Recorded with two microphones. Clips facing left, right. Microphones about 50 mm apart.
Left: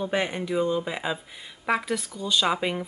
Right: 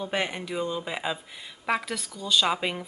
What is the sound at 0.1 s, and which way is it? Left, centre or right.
Speech, centre.